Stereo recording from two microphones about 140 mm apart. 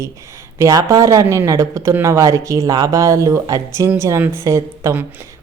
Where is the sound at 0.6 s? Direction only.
25° right (ahead or behind).